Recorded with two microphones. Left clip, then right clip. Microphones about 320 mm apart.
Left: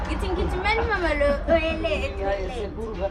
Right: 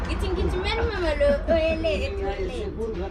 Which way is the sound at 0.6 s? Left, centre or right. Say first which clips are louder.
Left 5 dB; centre.